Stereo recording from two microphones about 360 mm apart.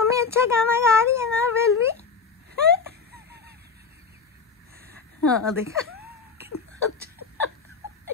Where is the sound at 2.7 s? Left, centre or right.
Right.